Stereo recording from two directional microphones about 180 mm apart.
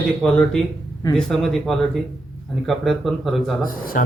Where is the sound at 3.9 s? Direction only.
50° left (ahead or behind).